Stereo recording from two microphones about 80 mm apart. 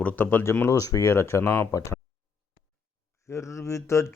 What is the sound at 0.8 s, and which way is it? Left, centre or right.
Speech, left.